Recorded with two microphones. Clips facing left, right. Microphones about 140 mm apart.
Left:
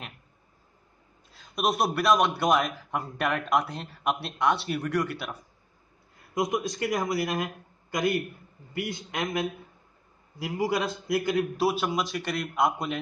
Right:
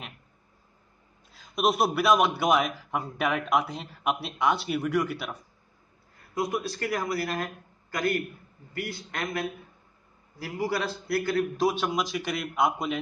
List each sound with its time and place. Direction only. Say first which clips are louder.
1.3 s a man's voice: right 2 dB; centre (ahead or behind)
6.3 s a man's voice: left 2 dB; 20° left (ahead or behind); by 13.0 s centre (ahead or behind)